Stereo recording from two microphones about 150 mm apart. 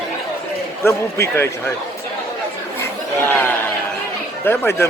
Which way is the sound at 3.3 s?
10° left (ahead or behind).